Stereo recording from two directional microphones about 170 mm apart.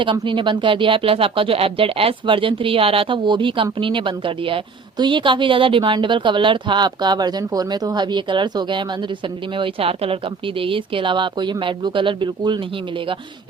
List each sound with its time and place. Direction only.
0.0 s speech: 30° right (ahead or behind)